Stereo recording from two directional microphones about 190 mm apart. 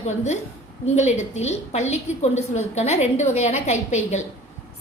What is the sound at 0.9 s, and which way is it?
A woman's voice, 35° left (ahead or behind).